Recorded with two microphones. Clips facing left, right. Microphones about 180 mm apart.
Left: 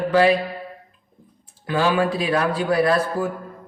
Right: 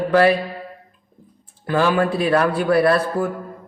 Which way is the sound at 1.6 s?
50° right (ahead or behind).